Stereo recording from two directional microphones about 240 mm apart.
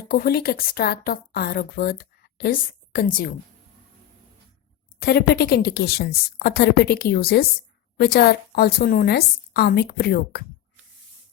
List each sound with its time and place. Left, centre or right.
0.1 s a woman's voice: left
4.9 s a woman's voice: left